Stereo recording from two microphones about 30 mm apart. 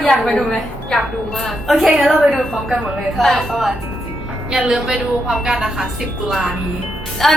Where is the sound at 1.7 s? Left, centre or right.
Centre.